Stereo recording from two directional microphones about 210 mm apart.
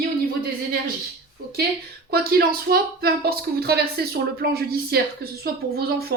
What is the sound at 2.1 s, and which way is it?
A woman's voice, 45° right (ahead or behind).